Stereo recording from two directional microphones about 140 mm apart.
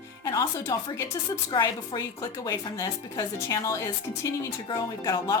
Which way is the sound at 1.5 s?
35° left (ahead or behind).